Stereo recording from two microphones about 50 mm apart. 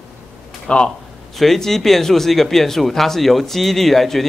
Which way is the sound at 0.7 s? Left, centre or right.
Left.